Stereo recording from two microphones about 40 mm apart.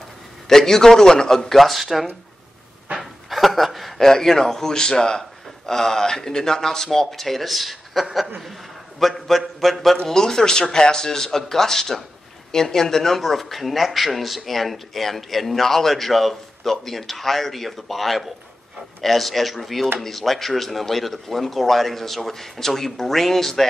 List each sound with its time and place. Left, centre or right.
0.5 s speech: centre
3.0 s a sound: centre
4.1 s speech: centre